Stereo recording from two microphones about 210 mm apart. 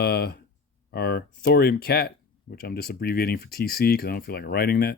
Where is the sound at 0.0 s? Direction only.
50° left (ahead or behind).